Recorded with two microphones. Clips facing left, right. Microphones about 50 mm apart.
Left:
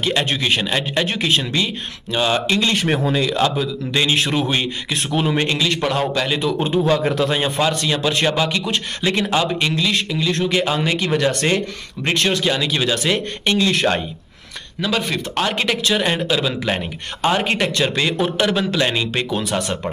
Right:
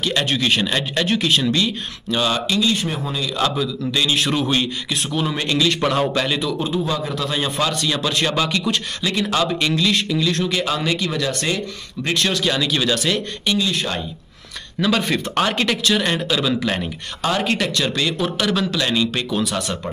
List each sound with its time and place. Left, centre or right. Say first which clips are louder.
0.0 s speech: even; centre
2.4 s speech: left 1 dB; left
2.7 s speech: left 5 dB; left
3.3 s a man's voice: left 2 dB; left
4.3 s a man's voice: even; centre
5.8 s a man's voice: right 1 dB; centre
6.6 s speech: left 5 dB; left
7.2 s a man's voice: left 3 dB; left
13.6 s speech: left 8 dB; left
14.8 s a man's voice: right 2 dB; centre
15.5 s speech: even; centre
17.2 s a man's voice: left 2 dB; left